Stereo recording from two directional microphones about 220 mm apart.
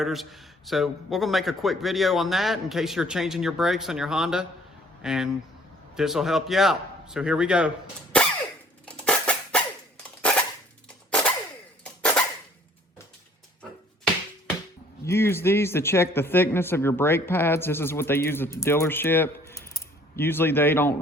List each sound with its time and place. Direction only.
0.0 s a man's voice: centre (ahead or behind)
8.9 s a sound: 5° left (ahead or behind)
10.2 s cap gun: 5° left (ahead or behind)
11.1 s a sound: 5° left (ahead or behind)
11.8 s cap gun: 5° left (ahead or behind)
15.0 s speech: 10° left (ahead or behind)